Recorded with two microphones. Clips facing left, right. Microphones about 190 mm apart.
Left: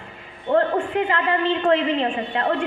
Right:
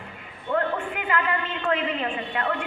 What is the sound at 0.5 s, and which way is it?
A woman's voice, 30° left (ahead or behind).